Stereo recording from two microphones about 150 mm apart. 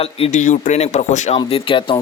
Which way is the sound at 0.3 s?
55° left (ahead or behind).